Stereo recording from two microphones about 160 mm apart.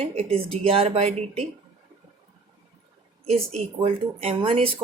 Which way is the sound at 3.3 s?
40° right (ahead or behind).